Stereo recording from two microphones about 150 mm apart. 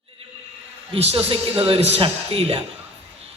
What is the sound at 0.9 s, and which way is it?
A man's voice, 40° right (ahead or behind).